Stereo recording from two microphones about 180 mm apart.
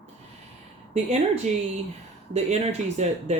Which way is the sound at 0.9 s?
40° right (ahead or behind).